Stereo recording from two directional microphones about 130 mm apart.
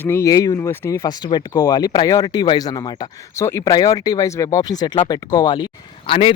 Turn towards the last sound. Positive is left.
turn(degrees=45)  # may be behind; listen again after turning